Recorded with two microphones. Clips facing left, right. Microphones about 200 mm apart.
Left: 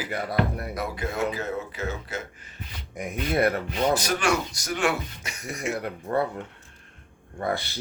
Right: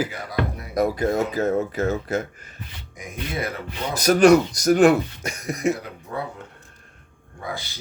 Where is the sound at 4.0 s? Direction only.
40° right (ahead or behind).